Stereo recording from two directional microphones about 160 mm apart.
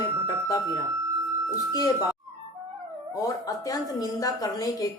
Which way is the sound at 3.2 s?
20° left (ahead or behind).